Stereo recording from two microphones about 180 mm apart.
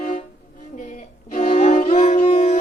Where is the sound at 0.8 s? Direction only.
45° left (ahead or behind).